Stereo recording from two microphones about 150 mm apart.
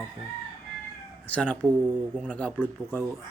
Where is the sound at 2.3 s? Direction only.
10° left (ahead or behind).